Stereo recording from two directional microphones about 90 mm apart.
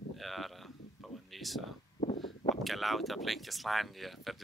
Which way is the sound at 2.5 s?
Centre (ahead or behind).